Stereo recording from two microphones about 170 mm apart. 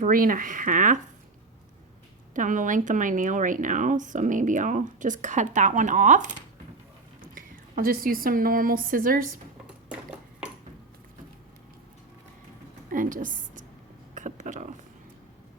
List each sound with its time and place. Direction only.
0.0 s speech: 55° right (ahead or behind)
2.3 s speech: 50° right (ahead or behind)
7.3 s a woman's voice: 55° right (ahead or behind)
12.9 s a sound: 50° right (ahead or behind)